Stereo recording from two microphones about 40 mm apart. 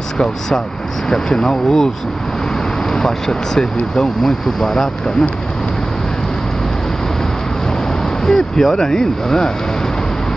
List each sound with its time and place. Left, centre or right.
1.0 s speech: centre
2.9 s speech: centre
8.0 s speech: centre